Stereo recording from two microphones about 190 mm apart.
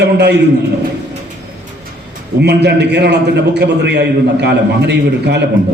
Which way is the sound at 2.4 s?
60° right (ahead or behind).